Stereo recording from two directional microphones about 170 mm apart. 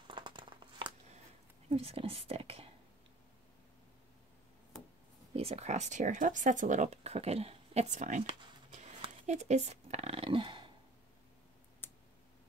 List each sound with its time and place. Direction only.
0.1 s crumpling: 30° right (ahead or behind)
1.7 s speech: 35° right (ahead or behind)
5.3 s speech: 35° right (ahead or behind)
8.6 s a sound: 45° right (ahead or behind); by 10.7 s 30° right (ahead or behind)
11.8 s clicking: 10° left (ahead or behind)